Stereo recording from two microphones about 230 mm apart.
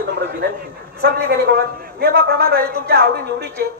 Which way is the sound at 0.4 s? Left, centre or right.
Right.